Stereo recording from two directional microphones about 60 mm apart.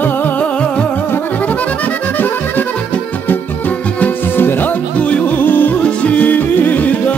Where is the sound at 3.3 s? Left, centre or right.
Left.